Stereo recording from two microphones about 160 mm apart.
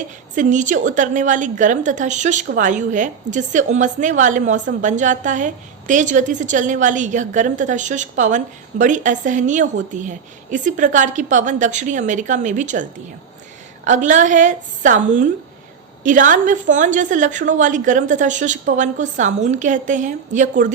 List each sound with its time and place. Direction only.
0.3 s a woman's voice: 50° right (ahead or behind)